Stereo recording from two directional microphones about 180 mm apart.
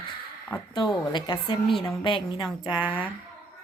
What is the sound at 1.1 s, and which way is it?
Speech, 25° left (ahead or behind).